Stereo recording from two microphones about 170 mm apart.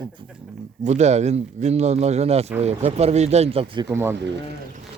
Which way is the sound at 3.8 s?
15° right (ahead or behind).